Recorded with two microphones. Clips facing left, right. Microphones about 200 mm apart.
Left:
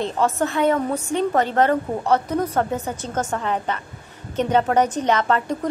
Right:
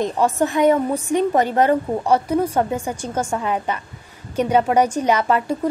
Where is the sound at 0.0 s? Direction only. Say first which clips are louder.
Right 2 dB; 15° right (ahead or behind).